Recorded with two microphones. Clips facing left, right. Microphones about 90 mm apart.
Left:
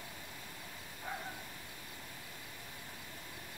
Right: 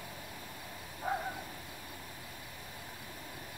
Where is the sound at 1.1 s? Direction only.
45° right (ahead or behind).